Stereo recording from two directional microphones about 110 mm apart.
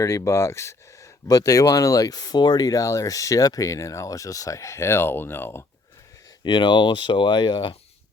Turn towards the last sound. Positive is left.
turn(degrees=45)  # may be behind; listen again after turning